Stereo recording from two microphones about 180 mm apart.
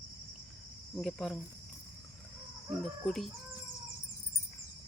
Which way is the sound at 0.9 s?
Centre (ahead or behind).